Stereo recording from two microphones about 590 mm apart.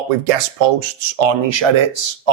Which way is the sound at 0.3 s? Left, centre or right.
Right.